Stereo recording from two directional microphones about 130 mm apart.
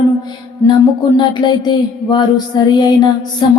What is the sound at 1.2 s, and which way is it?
Music, 35° left (ahead or behind).